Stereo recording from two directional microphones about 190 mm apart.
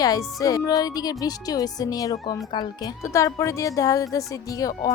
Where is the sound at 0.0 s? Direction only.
20° left (ahead or behind).